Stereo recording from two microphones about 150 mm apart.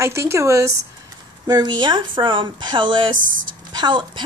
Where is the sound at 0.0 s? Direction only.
20° right (ahead or behind).